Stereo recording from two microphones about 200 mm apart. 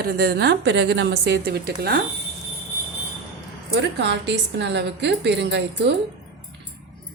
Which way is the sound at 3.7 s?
60° right (ahead or behind).